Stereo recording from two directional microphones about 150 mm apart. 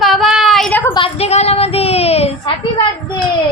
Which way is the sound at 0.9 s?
40° left (ahead or behind).